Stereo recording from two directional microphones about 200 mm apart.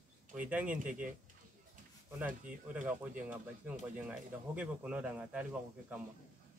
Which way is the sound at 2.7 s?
5° right (ahead or behind).